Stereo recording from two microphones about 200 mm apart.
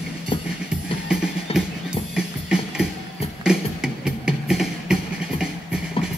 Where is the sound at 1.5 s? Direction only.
30° left (ahead or behind).